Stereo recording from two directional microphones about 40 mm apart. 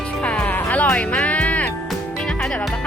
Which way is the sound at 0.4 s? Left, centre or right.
Left.